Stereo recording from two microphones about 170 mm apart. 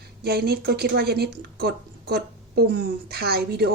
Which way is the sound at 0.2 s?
65° right (ahead or behind).